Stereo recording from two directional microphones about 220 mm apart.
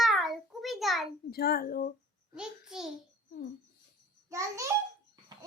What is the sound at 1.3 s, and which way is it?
Speech, 45° left (ahead or behind).